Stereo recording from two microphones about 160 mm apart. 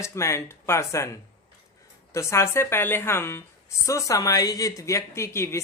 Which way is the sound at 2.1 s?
20° left (ahead or behind).